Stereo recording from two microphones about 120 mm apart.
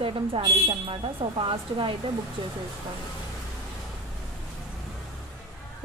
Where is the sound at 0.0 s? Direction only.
50° right (ahead or behind).